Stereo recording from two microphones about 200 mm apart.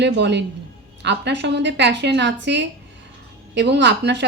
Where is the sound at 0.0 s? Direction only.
60° right (ahead or behind).